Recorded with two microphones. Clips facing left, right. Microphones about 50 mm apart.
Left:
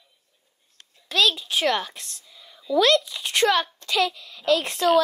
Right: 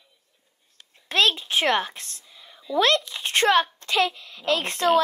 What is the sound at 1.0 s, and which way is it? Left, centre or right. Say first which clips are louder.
A woman's voice: right 1 dB; right.